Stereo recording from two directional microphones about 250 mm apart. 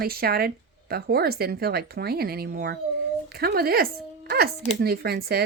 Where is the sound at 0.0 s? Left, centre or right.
Right.